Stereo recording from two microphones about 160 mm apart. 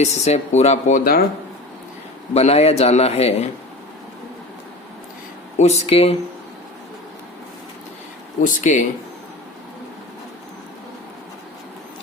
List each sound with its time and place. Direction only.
0.0 s speech: 45° left (ahead or behind)
2.3 s speech: 40° left (ahead or behind)
5.5 s speech: 45° left (ahead or behind)
8.4 s speech: 55° left (ahead or behind)